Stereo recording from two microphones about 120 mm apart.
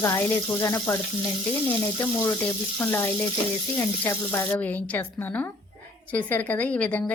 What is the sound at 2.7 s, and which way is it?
Speech, 20° left (ahead or behind).